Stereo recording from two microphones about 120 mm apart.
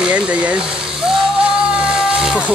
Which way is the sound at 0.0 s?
10° right (ahead or behind).